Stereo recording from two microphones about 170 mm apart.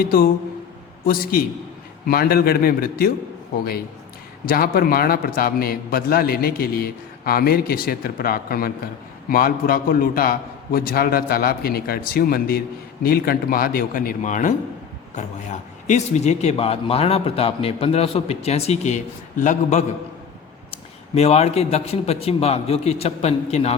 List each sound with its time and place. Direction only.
0.0 s a man's voice: 60° left (ahead or behind); by 19.8 s 45° left (ahead or behind)
21.2 s speech: 40° left (ahead or behind)